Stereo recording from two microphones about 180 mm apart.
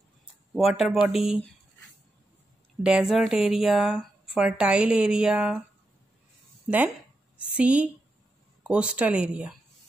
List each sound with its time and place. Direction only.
0.5 s speech: centre (ahead or behind)
2.8 s speech: 5° right (ahead or behind)
7.5 s speech: 5° right (ahead or behind)